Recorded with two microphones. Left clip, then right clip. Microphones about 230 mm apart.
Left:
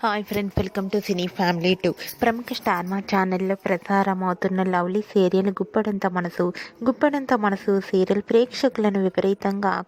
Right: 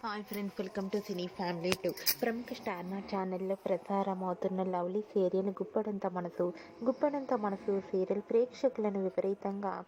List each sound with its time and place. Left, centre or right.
0.0 s a woman's voice: left